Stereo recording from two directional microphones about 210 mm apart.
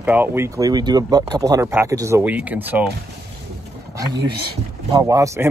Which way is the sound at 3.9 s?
20° right (ahead or behind).